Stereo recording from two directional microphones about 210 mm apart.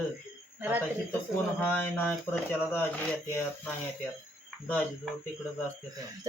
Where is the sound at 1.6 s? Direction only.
5° left (ahead or behind).